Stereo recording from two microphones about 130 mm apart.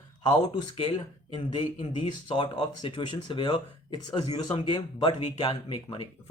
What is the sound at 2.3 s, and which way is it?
Speech, 35° left (ahead or behind).